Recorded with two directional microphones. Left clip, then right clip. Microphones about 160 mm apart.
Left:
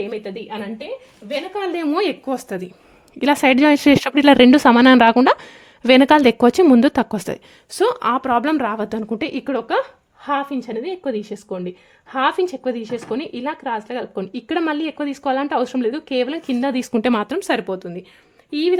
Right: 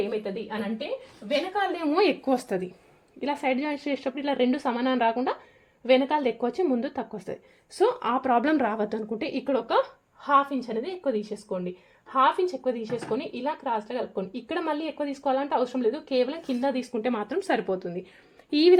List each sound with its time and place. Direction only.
0.1 s speech: 45° left (ahead or behind)
1.5 s a woman's voice: 75° left (ahead or behind)
2.0 s speech: 15° left (ahead or behind)
3.2 s speech: 75° left (ahead or behind)
7.7 s a woman's voice: 50° left (ahead or behind)
16.9 s speech: 65° left (ahead or behind)
17.2 s a woman's voice: 45° left (ahead or behind)
18.5 s speech: centre (ahead or behind)